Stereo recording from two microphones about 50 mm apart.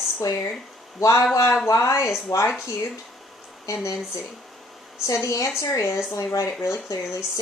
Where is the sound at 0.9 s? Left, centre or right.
Left.